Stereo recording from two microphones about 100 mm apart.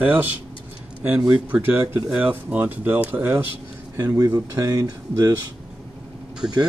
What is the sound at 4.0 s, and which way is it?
Speech, 35° right (ahead or behind).